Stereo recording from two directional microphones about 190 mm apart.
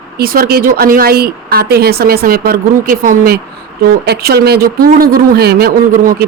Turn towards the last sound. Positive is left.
turn(degrees=-50)  # may be behind; listen again after turning